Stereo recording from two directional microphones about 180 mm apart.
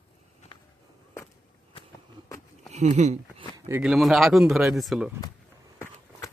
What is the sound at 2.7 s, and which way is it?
Speech, 40° right (ahead or behind).